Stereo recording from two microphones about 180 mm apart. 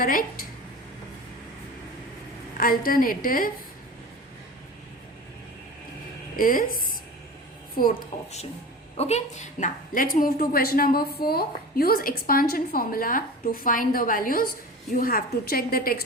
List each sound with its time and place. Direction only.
0.0 s a woman's voice: 50° left (ahead or behind)
2.6 s a woman's voice: 50° left (ahead or behind)
6.3 s a woman's voice: 50° left (ahead or behind)
9.0 s a woman's voice: 35° left (ahead or behind); by 16.0 s 55° left (ahead or behind)